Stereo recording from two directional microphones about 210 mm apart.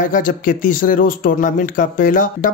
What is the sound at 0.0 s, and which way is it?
Speech, 40° left (ahead or behind).